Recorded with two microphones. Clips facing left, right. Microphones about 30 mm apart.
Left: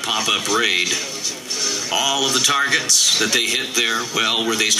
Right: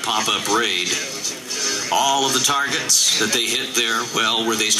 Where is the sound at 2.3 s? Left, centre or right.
Left.